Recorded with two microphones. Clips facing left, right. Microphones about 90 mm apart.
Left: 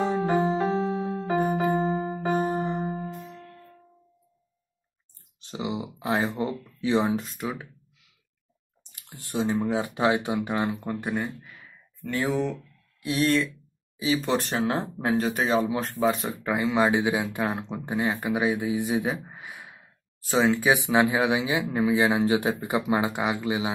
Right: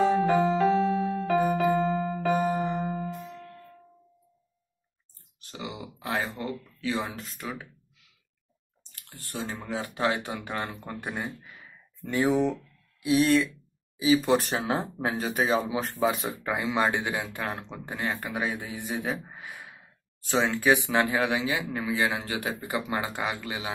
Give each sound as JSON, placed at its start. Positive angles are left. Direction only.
{"t": 0.5, "sound": "music", "side_deg": 30}
{"t": 2.6, "sound": "music", "side_deg": 15}
{"t": 5.4, "sound": "speech", "side_deg": 25}
{"t": 8.9, "sound": "speech", "side_deg": 20}
{"t": 12.0, "sound": "speech", "side_deg": -15}
{"t": 13.0, "sound": "speech", "side_deg": 0}